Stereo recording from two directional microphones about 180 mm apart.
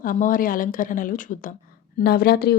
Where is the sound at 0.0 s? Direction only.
50° left (ahead or behind).